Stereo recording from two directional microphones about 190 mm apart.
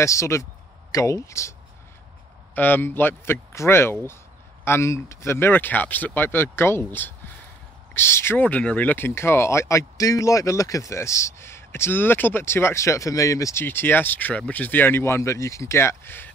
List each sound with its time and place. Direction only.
0.0 s speech: 15° left (ahead or behind)
2.5 s speech: 10° left (ahead or behind)